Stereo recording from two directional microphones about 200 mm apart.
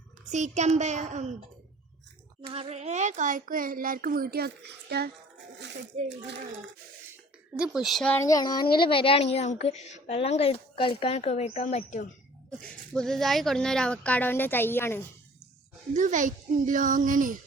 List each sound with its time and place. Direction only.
0.3 s a child's voice: 35° right (ahead or behind)
2.5 s a child's voice: 30° right (ahead or behind); by 6.3 s 60° right (ahead or behind)
7.6 s a woman's voice: centre (ahead or behind); by 12.0 s 35° left (ahead or behind)
12.5 s speech: 5° left (ahead or behind)
16.0 s a child's voice: 40° right (ahead or behind)